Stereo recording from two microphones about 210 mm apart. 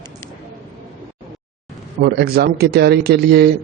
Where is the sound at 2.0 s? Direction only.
50° right (ahead or behind).